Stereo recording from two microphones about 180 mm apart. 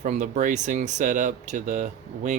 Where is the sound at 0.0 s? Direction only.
45° right (ahead or behind).